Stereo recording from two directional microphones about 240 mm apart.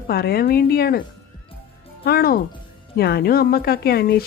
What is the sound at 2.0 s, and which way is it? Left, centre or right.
A woman's voice, left.